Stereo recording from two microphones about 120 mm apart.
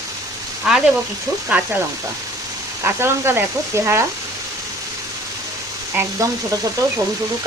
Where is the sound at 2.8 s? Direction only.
20° right (ahead or behind).